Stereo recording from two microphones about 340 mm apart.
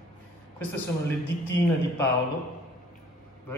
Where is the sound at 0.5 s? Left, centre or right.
Centre.